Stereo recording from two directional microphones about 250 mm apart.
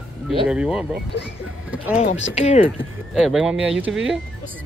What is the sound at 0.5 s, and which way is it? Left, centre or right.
Speech, centre.